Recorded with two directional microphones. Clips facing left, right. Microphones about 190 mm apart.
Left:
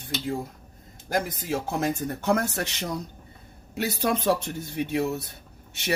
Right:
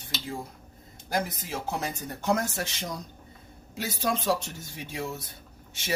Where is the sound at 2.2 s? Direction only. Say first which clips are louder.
Left 2 dB; 60° left (ahead or behind).